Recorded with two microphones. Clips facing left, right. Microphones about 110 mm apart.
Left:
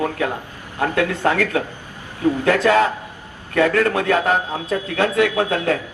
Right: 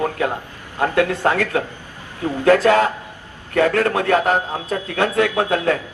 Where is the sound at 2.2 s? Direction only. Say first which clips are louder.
Right 2 dB; 40° right (ahead or behind).